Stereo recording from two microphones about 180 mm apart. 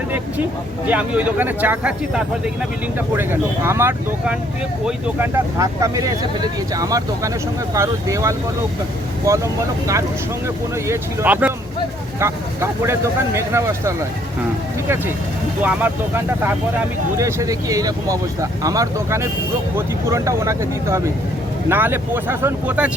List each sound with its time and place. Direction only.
0.9 s speech: 10° right (ahead or behind)
15.6 s speech: 10° right (ahead or behind)